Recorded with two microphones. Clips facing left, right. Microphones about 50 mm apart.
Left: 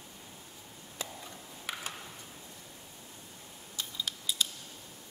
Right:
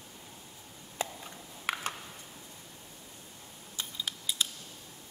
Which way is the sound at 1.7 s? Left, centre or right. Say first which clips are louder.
Right 6 dB; right.